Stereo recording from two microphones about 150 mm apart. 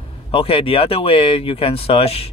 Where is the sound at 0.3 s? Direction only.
40° left (ahead or behind).